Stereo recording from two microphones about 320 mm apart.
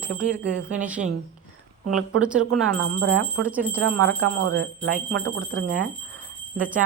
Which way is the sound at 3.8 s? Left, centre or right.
Right.